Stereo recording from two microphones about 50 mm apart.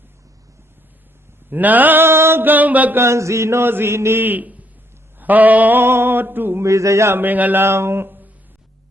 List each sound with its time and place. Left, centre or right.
1.5 s music: right
2.0 s music: right
3.0 s mantra: right
3.7 s chant: right
4.2 s music: right
5.8 s a sound: right
6.6 s a sound: right
7.1 s music: right
7.6 s a sound: right